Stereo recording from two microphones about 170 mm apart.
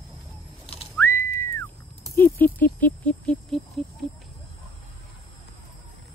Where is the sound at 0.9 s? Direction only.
15° left (ahead or behind).